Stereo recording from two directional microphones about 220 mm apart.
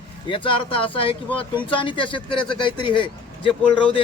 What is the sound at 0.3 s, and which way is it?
A man's voice, 20° left (ahead or behind).